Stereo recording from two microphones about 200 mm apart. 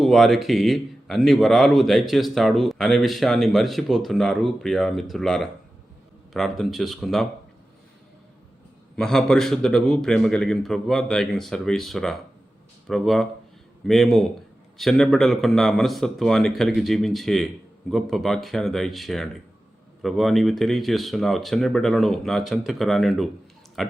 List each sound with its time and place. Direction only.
0.0 s speech: centre (ahead or behind)
9.0 s speech: centre (ahead or behind)